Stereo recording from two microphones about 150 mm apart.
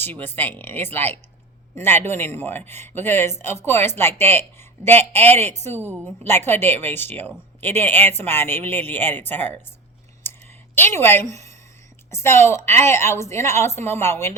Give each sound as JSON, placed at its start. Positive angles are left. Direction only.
{"t": 0.0, "sound": "speech", "side_deg": 15}
{"t": 10.3, "sound": "a sound", "side_deg": 15}
{"t": 10.8, "sound": "speech", "side_deg": 15}